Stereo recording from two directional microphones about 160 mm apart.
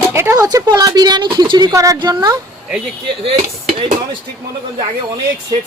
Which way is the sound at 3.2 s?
35° right (ahead or behind).